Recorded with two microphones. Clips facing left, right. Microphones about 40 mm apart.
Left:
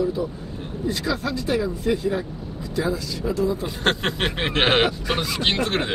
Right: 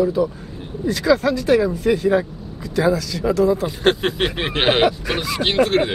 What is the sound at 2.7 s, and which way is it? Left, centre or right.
Speech, right.